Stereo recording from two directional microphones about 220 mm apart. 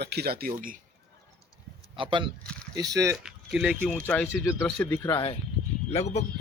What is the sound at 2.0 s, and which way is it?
Speech, 20° right (ahead or behind).